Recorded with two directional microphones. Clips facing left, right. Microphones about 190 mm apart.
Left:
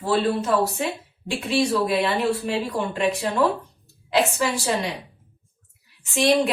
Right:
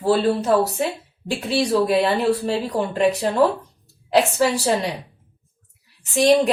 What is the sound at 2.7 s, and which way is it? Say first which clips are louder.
A woman's voice: right 4 dB; 40° right (ahead or behind).